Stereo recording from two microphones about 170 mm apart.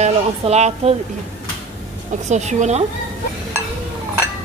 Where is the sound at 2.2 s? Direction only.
45° right (ahead or behind).